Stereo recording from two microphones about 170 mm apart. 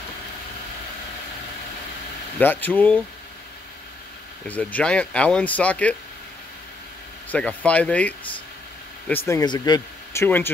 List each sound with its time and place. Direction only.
2.3 s speech: 10° left (ahead or behind)
4.5 s speech: 10° left (ahead or behind)
7.2 s speech: 5° left (ahead or behind); by 9.8 s 25° left (ahead or behind)
10.1 s speech: 10° left (ahead or behind)